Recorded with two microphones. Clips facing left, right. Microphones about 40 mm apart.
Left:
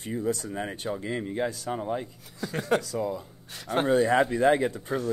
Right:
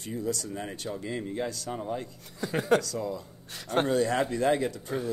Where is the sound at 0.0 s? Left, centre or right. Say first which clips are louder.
Left 3 dB; left.